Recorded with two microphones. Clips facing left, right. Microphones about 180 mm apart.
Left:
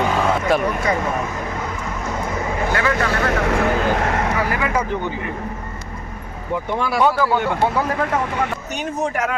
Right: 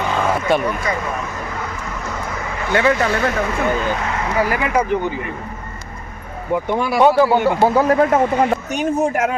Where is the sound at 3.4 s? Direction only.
70° left (ahead or behind).